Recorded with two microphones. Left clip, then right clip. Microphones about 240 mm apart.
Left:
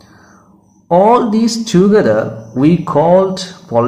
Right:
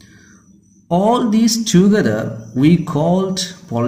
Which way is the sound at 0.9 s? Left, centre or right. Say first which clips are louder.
Left 6 dB; right.